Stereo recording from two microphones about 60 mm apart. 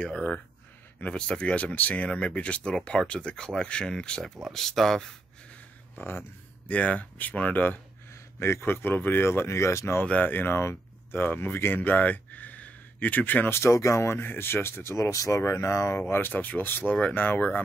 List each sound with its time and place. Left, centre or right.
0.0 s speech: centre
5.9 s speech: left
6.7 s speech: left
8.1 s speech: left
10.2 s speech: left
13.5 s speech: left
16.0 s speech: left